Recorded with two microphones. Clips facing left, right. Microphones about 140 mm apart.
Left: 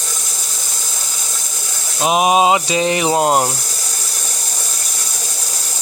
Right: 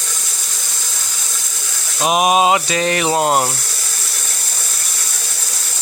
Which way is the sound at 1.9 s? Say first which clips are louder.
Left 1 dB; 20° left (ahead or behind).